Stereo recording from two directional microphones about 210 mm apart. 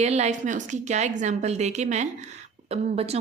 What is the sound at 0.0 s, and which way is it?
Speech, 30° right (ahead or behind).